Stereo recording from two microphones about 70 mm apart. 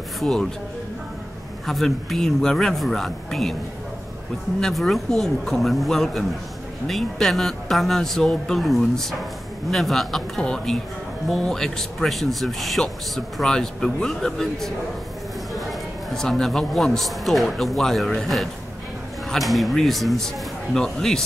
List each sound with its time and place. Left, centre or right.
0.2 s speech: centre
1.7 s speech: centre
4.6 s speech: centre
16.1 s speech: centre